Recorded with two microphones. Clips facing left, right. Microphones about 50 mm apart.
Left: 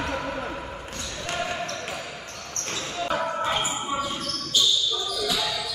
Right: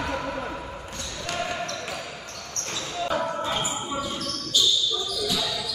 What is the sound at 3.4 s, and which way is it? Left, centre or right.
Basketball bounce, left.